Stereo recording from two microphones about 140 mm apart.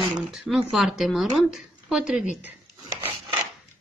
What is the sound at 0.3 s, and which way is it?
Speech, 5° right (ahead or behind).